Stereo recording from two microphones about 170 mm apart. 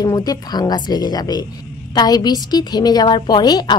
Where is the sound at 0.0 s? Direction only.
20° left (ahead or behind).